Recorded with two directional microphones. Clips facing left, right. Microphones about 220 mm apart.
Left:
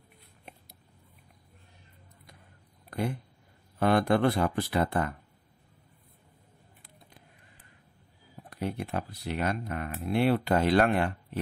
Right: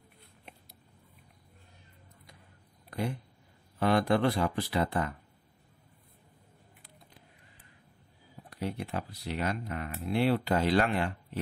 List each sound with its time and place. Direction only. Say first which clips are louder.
3.8 s speech: left 2 dB; 55° left (ahead or behind)
8.5 s speech: left 2 dB; 55° left (ahead or behind)